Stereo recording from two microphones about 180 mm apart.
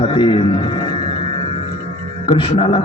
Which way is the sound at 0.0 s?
25° left (ahead or behind).